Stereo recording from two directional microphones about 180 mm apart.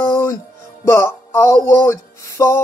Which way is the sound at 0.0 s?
15° left (ahead or behind).